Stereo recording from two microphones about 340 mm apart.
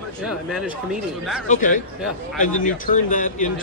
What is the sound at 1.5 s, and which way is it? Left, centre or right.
Speech, left.